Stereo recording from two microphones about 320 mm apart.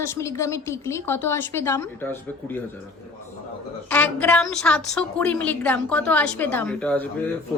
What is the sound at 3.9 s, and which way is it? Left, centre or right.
A woman's voice, centre.